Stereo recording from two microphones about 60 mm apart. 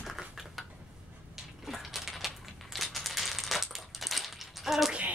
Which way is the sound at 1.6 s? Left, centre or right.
Centre.